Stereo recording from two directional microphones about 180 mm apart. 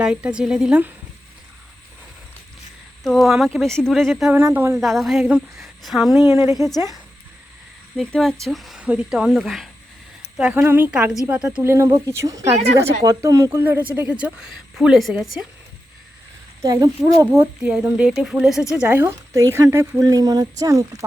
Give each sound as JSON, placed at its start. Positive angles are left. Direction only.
{"t": 0.0, "sound": "speech", "side_deg": -5}
{"t": 3.0, "sound": "speech", "side_deg": 0}
{"t": 4.4, "sound": "speech", "side_deg": -15}
{"t": 4.8, "sound": "speech", "side_deg": 0}
{"t": 6.2, "sound": "speech", "side_deg": -15}
{"t": 7.9, "sound": "speech", "side_deg": 0}
{"t": 16.6, "sound": "speech", "side_deg": -20}
{"t": 17.6, "sound": "speech", "side_deg": -5}